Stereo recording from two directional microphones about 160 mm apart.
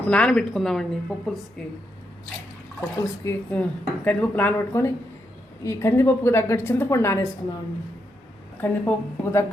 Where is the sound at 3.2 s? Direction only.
10° left (ahead or behind).